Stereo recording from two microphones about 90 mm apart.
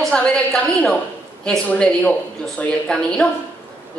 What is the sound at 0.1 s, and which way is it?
A woman's voice, 10° left (ahead or behind).